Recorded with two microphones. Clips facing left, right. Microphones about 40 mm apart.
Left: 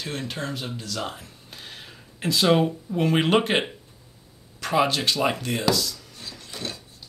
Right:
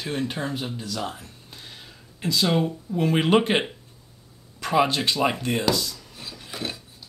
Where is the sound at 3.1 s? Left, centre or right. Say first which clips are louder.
Right 1 dB; centre.